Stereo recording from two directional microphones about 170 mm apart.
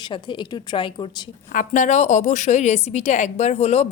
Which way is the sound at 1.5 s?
50° left (ahead or behind).